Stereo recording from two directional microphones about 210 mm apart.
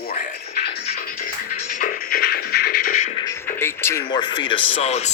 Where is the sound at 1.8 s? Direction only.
40° left (ahead or behind).